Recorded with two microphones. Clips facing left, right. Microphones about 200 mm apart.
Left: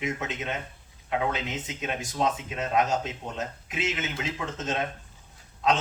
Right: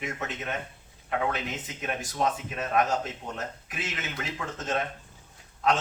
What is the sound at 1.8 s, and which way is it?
A man's voice, 20° left (ahead or behind).